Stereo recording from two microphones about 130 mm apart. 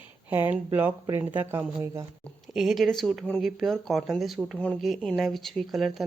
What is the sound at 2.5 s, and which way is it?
Speech, centre (ahead or behind).